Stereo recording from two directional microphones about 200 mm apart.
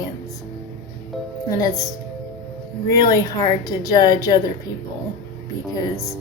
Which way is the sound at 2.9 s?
15° left (ahead or behind).